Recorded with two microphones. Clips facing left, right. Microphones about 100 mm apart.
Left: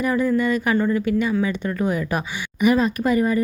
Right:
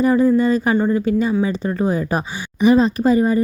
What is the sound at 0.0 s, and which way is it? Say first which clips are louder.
Speech: right 5 dB; 30° right (ahead or behind).